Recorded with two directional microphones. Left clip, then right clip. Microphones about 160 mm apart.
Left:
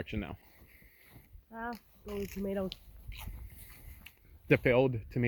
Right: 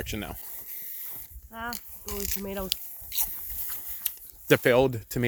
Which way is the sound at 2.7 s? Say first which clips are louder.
Right 13 dB; 35° right (ahead or behind).